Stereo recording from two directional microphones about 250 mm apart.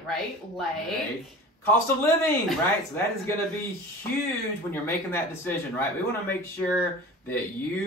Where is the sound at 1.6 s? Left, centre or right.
Centre.